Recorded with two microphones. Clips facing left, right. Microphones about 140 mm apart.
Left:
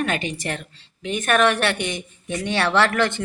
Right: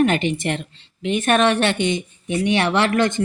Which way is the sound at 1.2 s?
25° right (ahead or behind).